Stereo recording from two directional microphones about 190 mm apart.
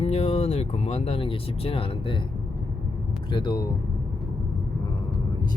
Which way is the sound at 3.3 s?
25° left (ahead or behind).